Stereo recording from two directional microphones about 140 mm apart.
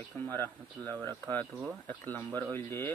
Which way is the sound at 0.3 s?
15° left (ahead or behind).